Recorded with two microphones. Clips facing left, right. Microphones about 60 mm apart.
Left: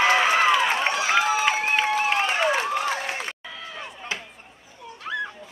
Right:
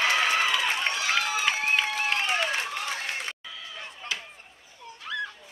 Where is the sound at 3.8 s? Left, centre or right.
Centre.